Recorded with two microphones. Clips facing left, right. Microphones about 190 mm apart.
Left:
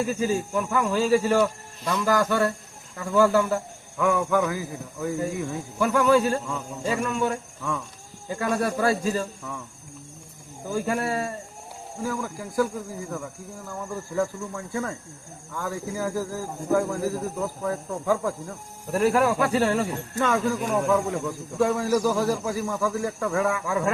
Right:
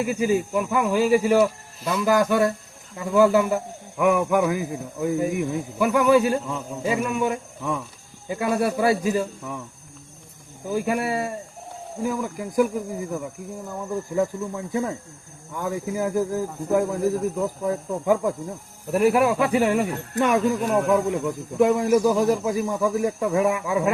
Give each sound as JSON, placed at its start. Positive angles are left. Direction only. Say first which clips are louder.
{"t": 0.0, "sound": "speech", "louder": "right 3 dB", "side_deg": -15}
{"t": 10.7, "sound": "speech", "louder": "right 2 dB", "side_deg": -15}
{"t": 14.2, "sound": "speech", "louder": "right 2 dB", "side_deg": -20}